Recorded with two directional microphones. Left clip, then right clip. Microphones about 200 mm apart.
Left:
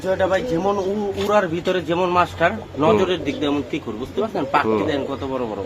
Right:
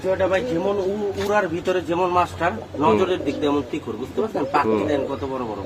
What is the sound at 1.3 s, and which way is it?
A man's voice, 40° left (ahead or behind).